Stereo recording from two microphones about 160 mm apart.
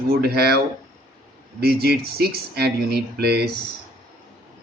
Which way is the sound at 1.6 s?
75° right (ahead or behind).